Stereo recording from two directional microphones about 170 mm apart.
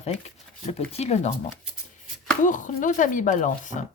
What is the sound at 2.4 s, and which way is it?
Speech, 50° left (ahead or behind).